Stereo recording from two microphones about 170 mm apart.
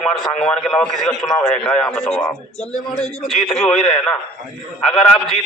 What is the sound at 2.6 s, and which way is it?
Speech, 40° left (ahead or behind).